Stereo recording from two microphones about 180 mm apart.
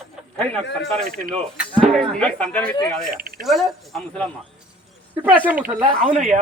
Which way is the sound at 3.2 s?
55° right (ahead or behind).